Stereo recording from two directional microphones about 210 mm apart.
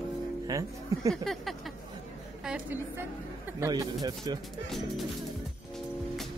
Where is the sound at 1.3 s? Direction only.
Centre (ahead or behind).